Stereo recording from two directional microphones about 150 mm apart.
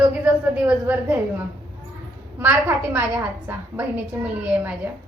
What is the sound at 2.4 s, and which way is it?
A woman's voice, 10° right (ahead or behind).